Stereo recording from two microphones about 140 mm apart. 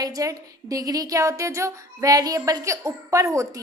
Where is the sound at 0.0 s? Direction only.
25° right (ahead or behind).